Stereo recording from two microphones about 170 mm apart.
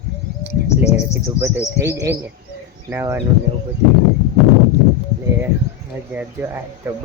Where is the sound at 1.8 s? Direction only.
15° right (ahead or behind).